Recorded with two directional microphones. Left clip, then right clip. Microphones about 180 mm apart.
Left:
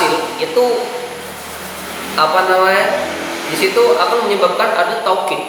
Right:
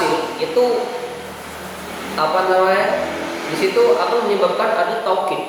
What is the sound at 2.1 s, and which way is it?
Speech, 10° right (ahead or behind).